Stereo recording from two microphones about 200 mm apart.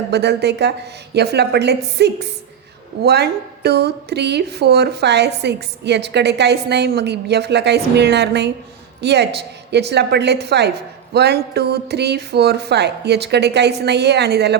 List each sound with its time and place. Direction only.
0.1 s speech: 55° right (ahead or behind)